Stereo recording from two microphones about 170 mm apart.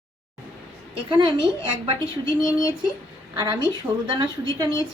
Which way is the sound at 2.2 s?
20° left (ahead or behind).